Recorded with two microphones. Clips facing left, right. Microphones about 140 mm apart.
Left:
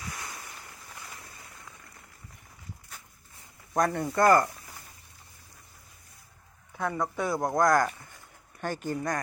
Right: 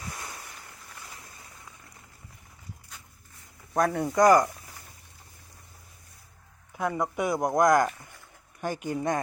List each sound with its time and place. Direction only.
3.8 s speech: 5° right (ahead or behind)
6.7 s speech: 15° right (ahead or behind)